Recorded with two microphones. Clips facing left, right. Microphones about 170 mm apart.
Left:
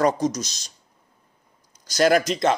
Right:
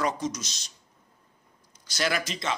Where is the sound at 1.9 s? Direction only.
45° left (ahead or behind).